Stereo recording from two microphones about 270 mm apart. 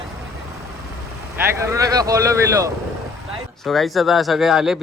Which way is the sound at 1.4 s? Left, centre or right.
Centre.